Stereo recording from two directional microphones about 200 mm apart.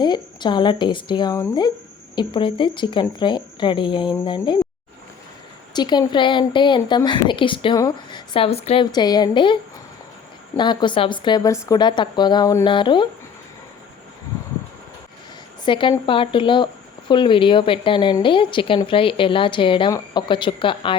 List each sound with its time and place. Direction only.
0.0 s speech: 20° left (ahead or behind)
5.7 s speech: 20° left (ahead or behind)
10.6 s speech: 20° left (ahead or behind)
15.6 s speech: 25° left (ahead or behind)